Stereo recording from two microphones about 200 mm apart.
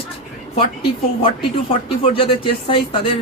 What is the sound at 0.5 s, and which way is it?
Speech, 25° left (ahead or behind).